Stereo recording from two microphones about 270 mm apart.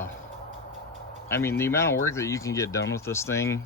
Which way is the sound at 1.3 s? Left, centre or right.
Centre.